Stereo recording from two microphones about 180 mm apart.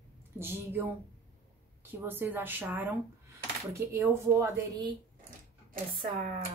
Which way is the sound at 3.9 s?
15° right (ahead or behind).